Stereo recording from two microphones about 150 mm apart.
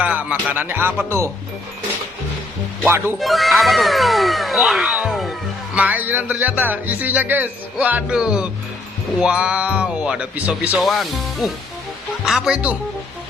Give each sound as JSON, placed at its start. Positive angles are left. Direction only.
{"t": 0.0, "sound": "speech", "side_deg": -10}
{"t": 2.8, "sound": "speech", "side_deg": -15}
{"t": 3.2, "sound": "music", "side_deg": 0}
{"t": 5.7, "sound": "speech", "side_deg": -10}